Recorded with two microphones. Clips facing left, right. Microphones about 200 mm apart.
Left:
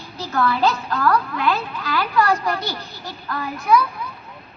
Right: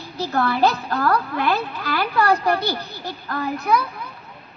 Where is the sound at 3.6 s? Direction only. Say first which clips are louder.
Left 4 dB; 60° right (ahead or behind).